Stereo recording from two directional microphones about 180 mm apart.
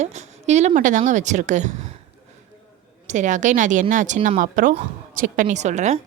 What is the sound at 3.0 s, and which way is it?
A woman's voice, 45° right (ahead or behind).